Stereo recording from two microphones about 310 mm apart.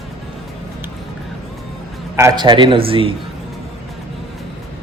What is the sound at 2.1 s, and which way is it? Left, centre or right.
Speech, centre.